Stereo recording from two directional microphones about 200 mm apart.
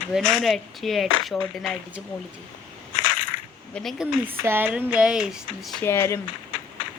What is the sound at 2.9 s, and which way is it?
Crushing, 40° left (ahead or behind).